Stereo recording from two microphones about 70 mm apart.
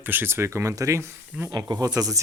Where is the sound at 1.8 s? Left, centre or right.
Right.